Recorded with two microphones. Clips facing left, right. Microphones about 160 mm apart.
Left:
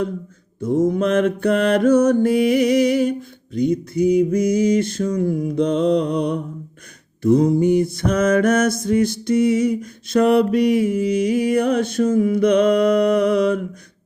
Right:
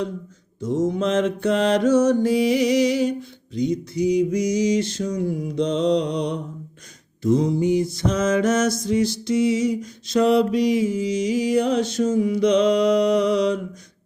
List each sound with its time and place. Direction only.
0.6 s mantra: 55° left (ahead or behind)